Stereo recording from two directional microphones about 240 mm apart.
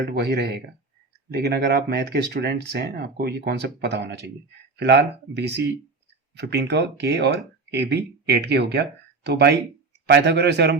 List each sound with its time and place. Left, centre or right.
0.1 s speech: right